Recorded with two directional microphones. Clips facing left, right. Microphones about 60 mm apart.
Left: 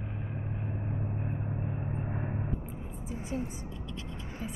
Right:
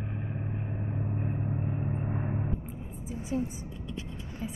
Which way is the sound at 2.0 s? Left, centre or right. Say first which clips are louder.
Right 2 dB; centre.